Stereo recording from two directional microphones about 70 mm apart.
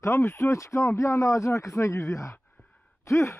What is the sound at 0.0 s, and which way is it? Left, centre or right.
Speech, left.